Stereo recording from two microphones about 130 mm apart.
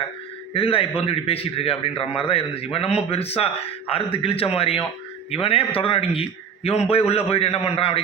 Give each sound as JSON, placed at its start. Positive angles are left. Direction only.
{"t": 0.5, "sound": "a man's voice", "side_deg": 45}